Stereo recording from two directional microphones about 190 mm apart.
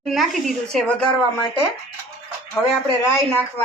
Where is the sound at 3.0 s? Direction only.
15° left (ahead or behind).